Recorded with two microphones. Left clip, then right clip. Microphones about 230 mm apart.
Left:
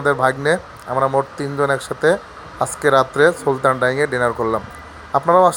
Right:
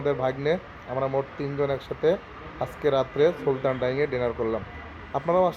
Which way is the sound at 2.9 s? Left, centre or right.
Left.